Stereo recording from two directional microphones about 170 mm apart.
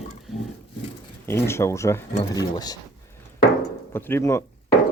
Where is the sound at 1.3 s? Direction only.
15° left (ahead or behind).